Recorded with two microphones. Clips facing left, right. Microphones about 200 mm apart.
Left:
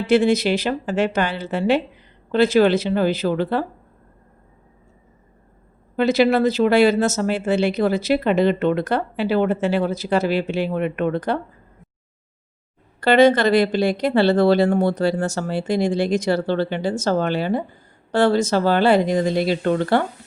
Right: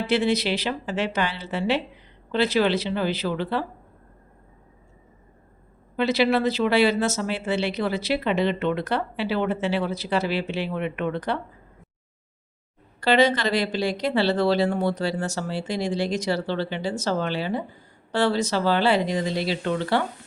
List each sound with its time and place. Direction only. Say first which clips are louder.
0.1 s speech: left 7 dB; 45° left (ahead or behind)
6.0 s speech: left 5 dB; 45° left (ahead or behind)
13.0 s speech: left 6 dB; 50° left (ahead or behind)